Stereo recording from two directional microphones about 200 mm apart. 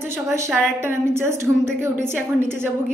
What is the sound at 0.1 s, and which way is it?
A woman's voice, 15° right (ahead or behind).